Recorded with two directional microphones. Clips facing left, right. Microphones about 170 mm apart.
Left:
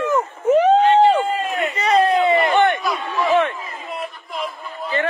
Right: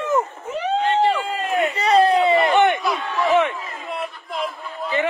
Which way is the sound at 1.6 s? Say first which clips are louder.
Right 1 dB; 30° right (ahead or behind).